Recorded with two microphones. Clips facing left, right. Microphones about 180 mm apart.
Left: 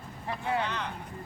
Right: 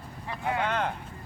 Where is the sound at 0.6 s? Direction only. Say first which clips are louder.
Right 6 dB; 50° right (ahead or behind).